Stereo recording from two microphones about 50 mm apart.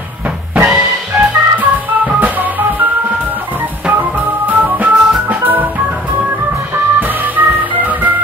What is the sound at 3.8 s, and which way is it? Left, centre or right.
Organ, right.